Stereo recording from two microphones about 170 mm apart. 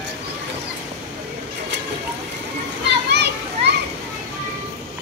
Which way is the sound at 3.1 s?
85° right.